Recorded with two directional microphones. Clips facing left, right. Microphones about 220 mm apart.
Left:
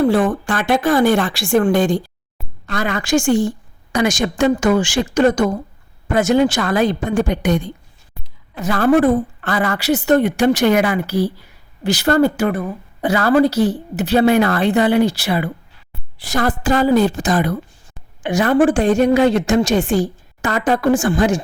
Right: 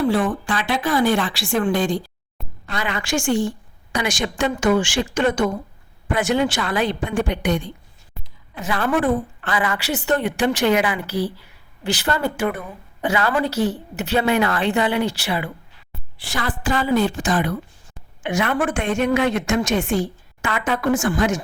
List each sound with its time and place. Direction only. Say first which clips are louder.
0.0 s a woman's voice: left 4 dB; 45° left (ahead or behind)